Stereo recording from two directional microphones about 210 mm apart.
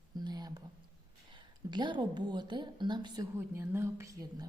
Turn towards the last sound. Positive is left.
turn(degrees=-15)  # may be behind; listen again after turning